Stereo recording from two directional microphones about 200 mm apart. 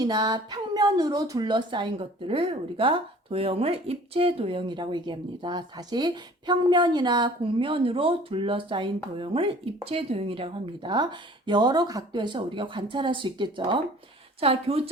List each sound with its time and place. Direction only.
0.0 s speech: 20° right (ahead or behind)